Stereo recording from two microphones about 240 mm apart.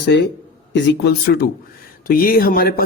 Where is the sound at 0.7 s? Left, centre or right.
Left.